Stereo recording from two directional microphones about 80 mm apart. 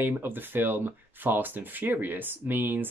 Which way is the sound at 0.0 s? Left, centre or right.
Right.